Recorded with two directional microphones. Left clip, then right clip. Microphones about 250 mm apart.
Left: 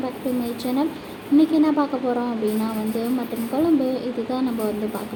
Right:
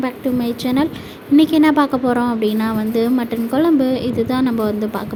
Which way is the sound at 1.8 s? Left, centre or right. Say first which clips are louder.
Right 6 dB; right.